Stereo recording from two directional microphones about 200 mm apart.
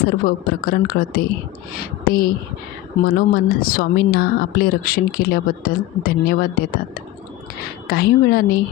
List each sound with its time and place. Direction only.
0.0 s speech: 50° left (ahead or behind)
7.9 s speech: 50° left (ahead or behind)